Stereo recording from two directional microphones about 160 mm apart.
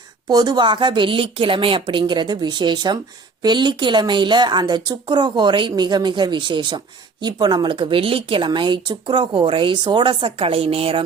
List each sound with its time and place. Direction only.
0.3 s a woman's voice: 25° right (ahead or behind)